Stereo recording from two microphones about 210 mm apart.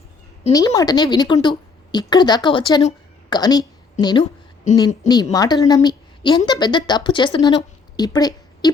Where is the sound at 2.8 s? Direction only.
20° left (ahead or behind).